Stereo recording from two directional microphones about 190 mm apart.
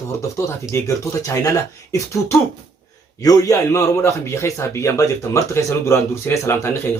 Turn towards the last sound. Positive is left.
turn(degrees=15)  # may be behind; listen again after turning